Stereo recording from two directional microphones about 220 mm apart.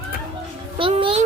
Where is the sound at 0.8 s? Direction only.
25° right (ahead or behind).